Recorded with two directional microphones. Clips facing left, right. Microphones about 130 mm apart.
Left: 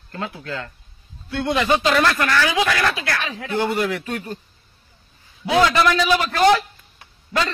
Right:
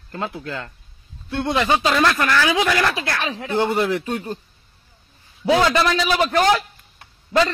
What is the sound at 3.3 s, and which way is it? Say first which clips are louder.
A man's voice: right 3 dB; 25° right (ahead or behind).